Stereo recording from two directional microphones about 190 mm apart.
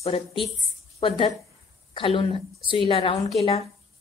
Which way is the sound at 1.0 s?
25° left (ahead or behind).